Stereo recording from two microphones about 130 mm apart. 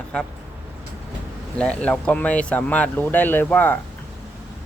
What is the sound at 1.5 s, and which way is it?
Speech, 10° left (ahead or behind).